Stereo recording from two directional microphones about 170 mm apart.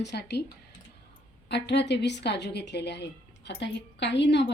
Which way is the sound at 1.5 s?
90° left.